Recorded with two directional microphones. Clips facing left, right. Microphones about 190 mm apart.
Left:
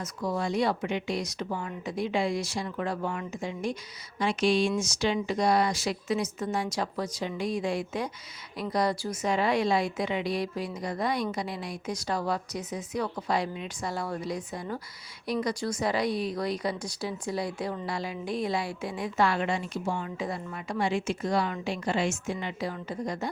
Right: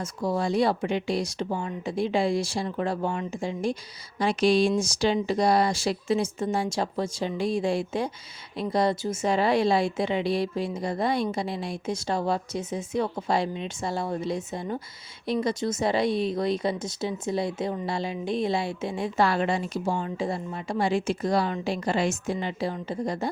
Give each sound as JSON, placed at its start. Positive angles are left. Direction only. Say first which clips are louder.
{"t": 0.0, "sound": "a woman's voice", "louder": "right 3 dB", "side_deg": -30}